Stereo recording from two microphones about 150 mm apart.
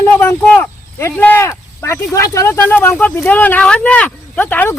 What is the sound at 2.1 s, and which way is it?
Speech, 20° left (ahead or behind).